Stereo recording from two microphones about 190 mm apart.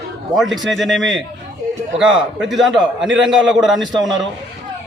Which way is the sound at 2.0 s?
5° right (ahead or behind).